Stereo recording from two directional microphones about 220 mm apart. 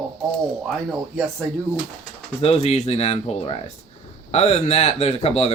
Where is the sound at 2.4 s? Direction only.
30° left (ahead or behind).